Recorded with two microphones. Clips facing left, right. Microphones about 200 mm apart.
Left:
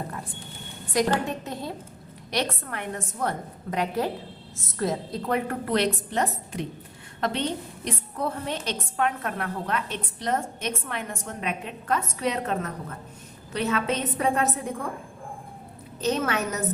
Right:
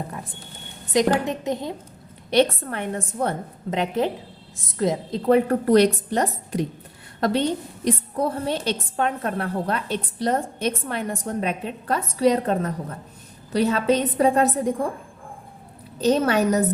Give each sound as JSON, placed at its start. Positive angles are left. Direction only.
{"t": 1.2, "sound": "a woman's voice", "side_deg": -20}
{"t": 5.2, "sound": "a woman's voice", "side_deg": -35}
{"t": 16.0, "sound": "a woman's voice", "side_deg": -35}